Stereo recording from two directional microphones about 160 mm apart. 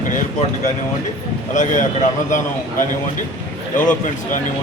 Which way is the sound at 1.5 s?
50° left (ahead or behind).